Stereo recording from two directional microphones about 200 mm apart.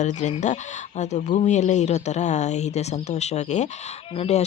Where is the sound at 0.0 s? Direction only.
35° left (ahead or behind).